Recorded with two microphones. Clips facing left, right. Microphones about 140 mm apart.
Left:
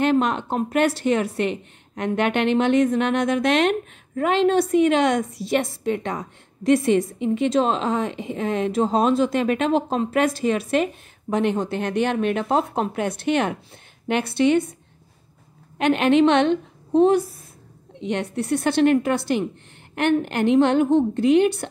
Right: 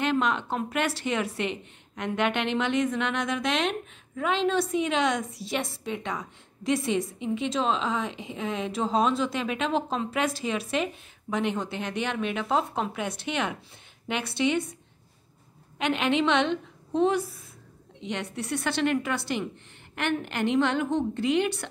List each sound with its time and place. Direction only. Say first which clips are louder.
0.0 s a woman's voice: left 6 dB; 45° left (ahead or behind)
15.8 s a woman's voice: left 8 dB; 50° left (ahead or behind)